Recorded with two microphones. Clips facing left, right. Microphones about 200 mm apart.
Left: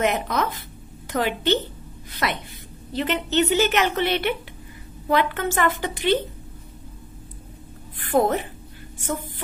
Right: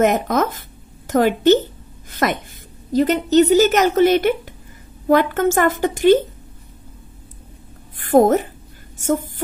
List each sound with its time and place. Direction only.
0.0 s a woman's voice: 45° right (ahead or behind)
8.0 s a woman's voice: 45° right (ahead or behind)